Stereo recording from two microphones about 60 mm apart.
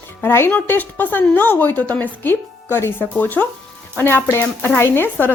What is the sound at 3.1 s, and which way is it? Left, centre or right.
Speech, left.